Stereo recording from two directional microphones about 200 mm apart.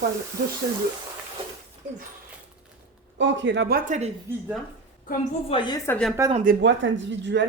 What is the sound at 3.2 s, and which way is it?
Speech, 60° right (ahead or behind).